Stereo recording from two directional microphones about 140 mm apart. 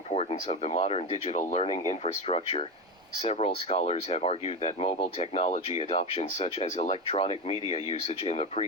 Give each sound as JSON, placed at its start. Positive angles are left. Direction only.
{"t": 0.1, "sound": "speech", "side_deg": 45}
{"t": 1.4, "sound": "speech", "side_deg": 60}
{"t": 1.9, "sound": "speech", "side_deg": 45}